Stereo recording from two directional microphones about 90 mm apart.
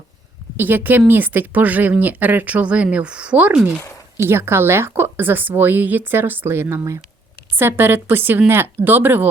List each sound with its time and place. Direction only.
0.5 s speech: 20° right (ahead or behind)
4.3 s a woman's voice: 25° right (ahead or behind)